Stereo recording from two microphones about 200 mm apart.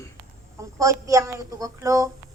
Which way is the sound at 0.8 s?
15° right (ahead or behind).